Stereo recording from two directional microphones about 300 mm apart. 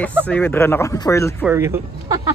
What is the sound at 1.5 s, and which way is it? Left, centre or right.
Speech, centre.